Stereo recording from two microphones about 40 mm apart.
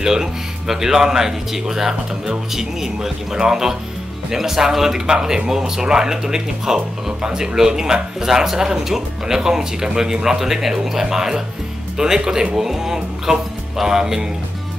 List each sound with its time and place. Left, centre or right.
0.0 s speech: centre